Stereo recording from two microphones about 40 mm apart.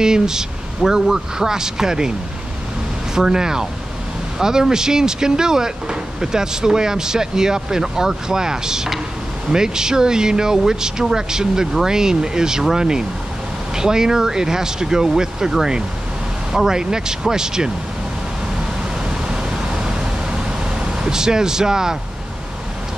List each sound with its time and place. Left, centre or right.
0.0 s speech: centre
3.2 s speech: centre
19.0 s vehicle: centre